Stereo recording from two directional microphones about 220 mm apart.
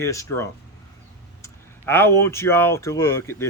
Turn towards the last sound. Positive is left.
turn(degrees=10)  # may be behind; listen again after turning